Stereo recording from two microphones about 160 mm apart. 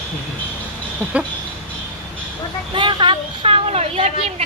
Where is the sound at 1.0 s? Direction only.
10° right (ahead or behind).